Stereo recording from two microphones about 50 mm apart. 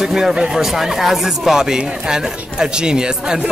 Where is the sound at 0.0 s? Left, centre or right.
Centre.